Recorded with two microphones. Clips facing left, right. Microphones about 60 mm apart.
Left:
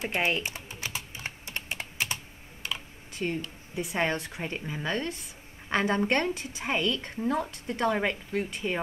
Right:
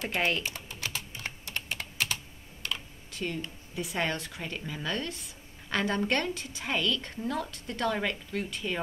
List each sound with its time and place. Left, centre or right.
0.0 s typing: centre
2.6 s computer keyboard: centre
3.1 s a sound: left
3.7 s a woman's voice: left